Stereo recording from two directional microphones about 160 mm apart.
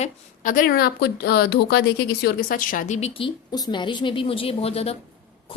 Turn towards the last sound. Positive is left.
turn(degrees=40)  # may be behind; listen again after turning